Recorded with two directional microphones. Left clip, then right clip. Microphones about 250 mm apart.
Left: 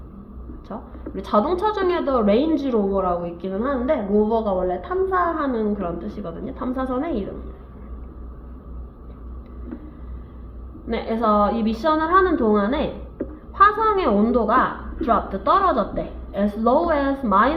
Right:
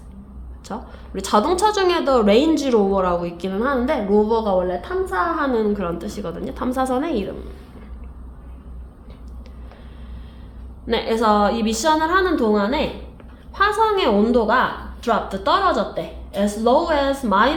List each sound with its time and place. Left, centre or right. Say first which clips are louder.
0.7 s speech: right 3 dB; right
10.8 s a woman's voice: right 3 dB; right